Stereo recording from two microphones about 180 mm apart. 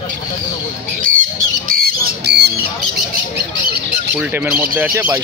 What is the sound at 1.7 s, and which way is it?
Chicken, 55° right (ahead or behind).